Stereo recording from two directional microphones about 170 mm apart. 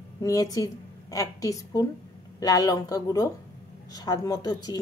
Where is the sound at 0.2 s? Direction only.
20° left (ahead or behind).